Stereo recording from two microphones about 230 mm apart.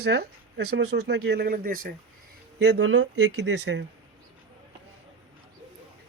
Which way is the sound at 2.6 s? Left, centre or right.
Right.